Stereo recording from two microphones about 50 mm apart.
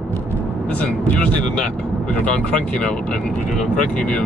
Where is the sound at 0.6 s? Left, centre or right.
Left.